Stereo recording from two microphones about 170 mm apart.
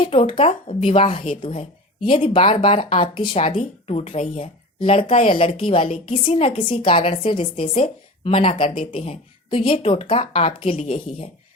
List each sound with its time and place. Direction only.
0.0 s speech: 30° left (ahead or behind)